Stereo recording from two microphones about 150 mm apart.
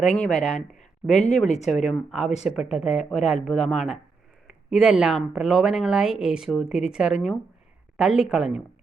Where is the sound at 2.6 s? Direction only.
45° left (ahead or behind).